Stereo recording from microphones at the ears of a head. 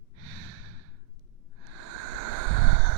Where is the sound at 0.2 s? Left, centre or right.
Right.